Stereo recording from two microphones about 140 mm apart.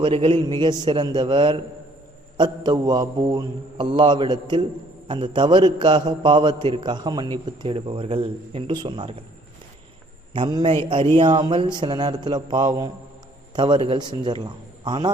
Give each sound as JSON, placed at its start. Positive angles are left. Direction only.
{"t": 0.0, "sound": "a man's voice", "side_deg": -40}
{"t": 10.3, "sound": "a man's voice", "side_deg": -35}